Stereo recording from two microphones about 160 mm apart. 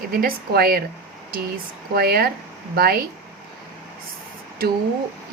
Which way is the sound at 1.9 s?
75° right (ahead or behind).